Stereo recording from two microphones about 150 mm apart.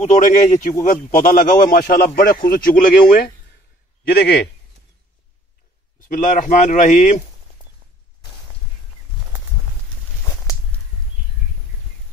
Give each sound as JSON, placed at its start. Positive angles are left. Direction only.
{"t": 0.0, "sound": "a man's voice", "side_deg": 55}
{"t": 4.1, "sound": "a man's voice", "side_deg": 90}
{"t": 5.9, "sound": "a man's voice", "side_deg": 65}